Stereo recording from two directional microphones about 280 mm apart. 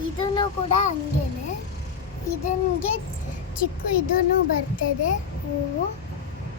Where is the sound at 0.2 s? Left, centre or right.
Centre.